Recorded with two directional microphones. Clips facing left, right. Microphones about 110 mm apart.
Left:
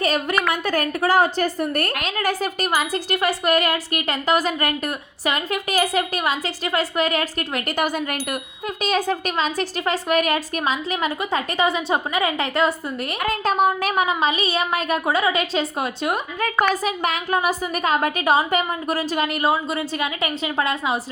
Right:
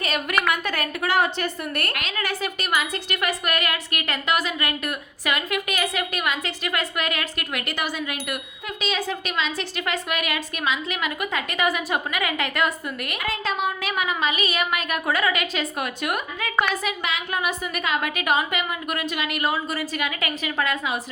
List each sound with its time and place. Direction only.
0.0 s a woman's voice: 35° left (ahead or behind)
13.2 s a woman's voice: 45° left (ahead or behind); by 16.2 s 25° left (ahead or behind)
16.8 s a woman's voice: 40° left (ahead or behind)